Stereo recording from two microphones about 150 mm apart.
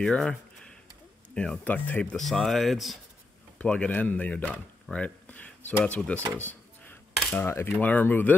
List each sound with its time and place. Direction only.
0.0 s speech: 5° left (ahead or behind)
6.1 s speech: 15° right (ahead or behind)
6.4 s cutlery: 10° left (ahead or behind)
7.3 s speech: 15° left (ahead or behind)